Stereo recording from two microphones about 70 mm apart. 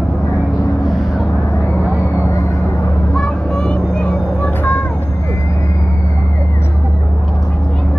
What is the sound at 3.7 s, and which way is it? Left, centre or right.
Vehicle, centre.